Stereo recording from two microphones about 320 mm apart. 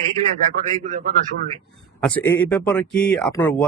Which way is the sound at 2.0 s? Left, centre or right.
Centre.